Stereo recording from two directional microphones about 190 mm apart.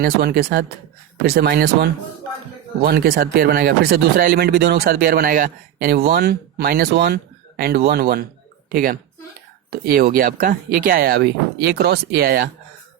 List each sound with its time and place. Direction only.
0.0 s speech: 55° right (ahead or behind)